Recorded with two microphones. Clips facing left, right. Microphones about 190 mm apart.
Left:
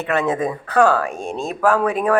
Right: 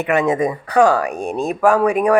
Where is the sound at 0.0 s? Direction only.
15° right (ahead or behind).